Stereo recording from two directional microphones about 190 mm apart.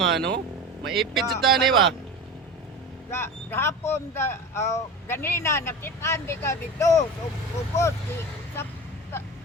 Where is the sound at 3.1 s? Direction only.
15° left (ahead or behind).